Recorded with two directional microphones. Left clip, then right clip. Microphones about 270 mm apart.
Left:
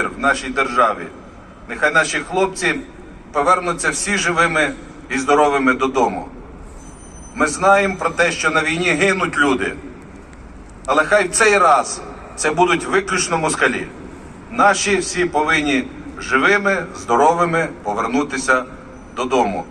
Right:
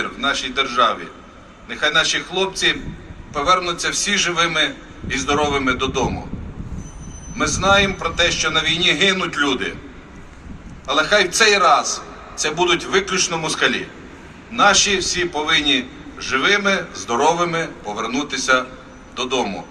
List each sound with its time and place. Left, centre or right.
0.0 s a man's voice: right
7.3 s a man's voice: right
10.8 s a man's voice: right